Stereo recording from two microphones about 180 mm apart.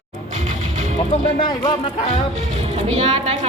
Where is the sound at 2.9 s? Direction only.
35° right (ahead or behind).